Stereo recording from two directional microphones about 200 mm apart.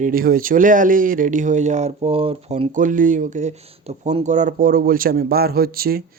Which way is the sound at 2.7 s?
40° right (ahead or behind).